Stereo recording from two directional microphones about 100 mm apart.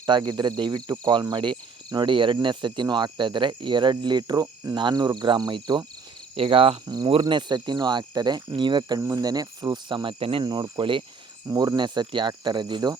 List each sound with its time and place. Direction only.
0.0 s cricket: 40° right (ahead or behind)
6.3 s speech: 65° right (ahead or behind)
6.8 s cricket: 45° right (ahead or behind)
9.0 s cricket: 35° right (ahead or behind); by 10.4 s 65° right (ahead or behind)
10.4 s cricket: 50° right (ahead or behind)
11.4 s cricket: 40° right (ahead or behind)